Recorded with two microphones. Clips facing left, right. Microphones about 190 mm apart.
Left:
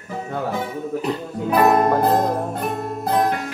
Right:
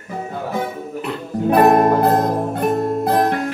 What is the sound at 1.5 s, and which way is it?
Music, 50° right (ahead or behind).